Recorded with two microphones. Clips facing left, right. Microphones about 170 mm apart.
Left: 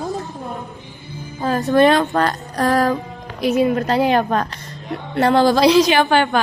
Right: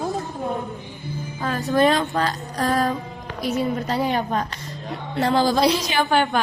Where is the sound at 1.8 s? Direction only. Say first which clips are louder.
Left 4 dB; 70° left (ahead or behind).